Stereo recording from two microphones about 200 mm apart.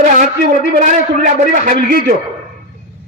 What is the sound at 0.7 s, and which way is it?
A man's voice, 40° right (ahead or behind).